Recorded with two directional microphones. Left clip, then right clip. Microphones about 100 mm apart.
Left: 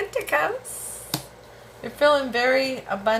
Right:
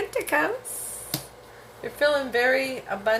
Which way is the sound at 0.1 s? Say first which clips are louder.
Left 1 dB; 40° right (ahead or behind).